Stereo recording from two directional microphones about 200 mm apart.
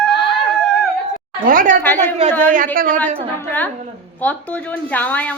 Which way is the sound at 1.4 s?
40° right (ahead or behind).